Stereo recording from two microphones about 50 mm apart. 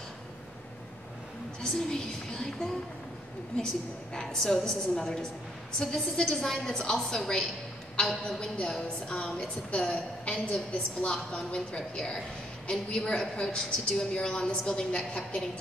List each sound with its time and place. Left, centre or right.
1.7 s a woman's voice: centre
4.1 s a woman's voice: centre